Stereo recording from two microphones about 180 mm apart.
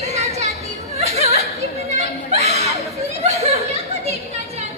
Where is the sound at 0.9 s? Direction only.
40° right (ahead or behind).